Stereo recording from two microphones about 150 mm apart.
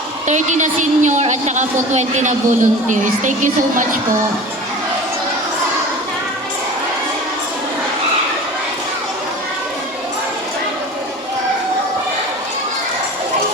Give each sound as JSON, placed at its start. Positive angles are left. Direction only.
{"t": 0.3, "sound": "a woman's voice", "side_deg": -55}